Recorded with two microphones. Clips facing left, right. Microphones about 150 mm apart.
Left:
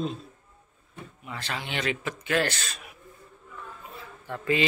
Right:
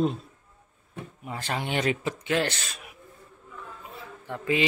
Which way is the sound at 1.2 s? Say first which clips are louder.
Right 4 dB; 45° right (ahead or behind).